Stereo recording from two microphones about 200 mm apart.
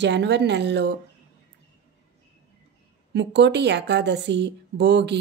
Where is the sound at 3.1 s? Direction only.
60° right (ahead or behind).